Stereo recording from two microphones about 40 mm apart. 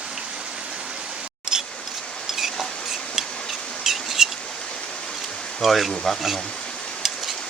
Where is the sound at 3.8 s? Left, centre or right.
Centre.